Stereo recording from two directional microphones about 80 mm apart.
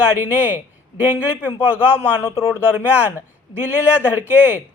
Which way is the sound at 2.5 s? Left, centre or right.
Right.